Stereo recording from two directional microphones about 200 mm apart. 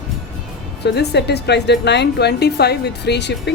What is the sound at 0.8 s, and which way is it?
A woman's voice, 55° left (ahead or behind).